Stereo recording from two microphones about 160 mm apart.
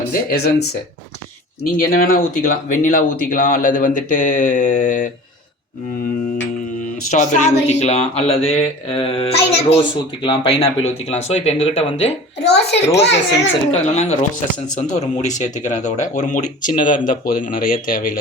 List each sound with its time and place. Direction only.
0.1 s speech: 75° left (ahead or behind)
1.6 s speech: 65° left (ahead or behind)
7.1 s speech: 50° left (ahead or behind)
12.4 s a child's voice: 90° left
13.7 s speech: 45° left (ahead or behind); by 18.2 s 60° left (ahead or behind)